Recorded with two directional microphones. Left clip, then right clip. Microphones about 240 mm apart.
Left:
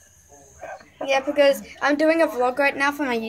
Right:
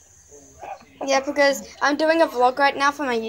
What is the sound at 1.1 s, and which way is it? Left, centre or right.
A woman's voice, centre.